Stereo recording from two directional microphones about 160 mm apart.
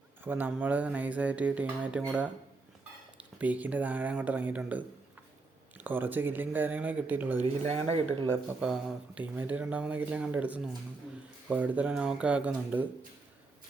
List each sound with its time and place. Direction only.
0.3 s speech: 10° right (ahead or behind)
7.7 s speech: 40° right (ahead or behind)
8.4 s speech: 5° right (ahead or behind)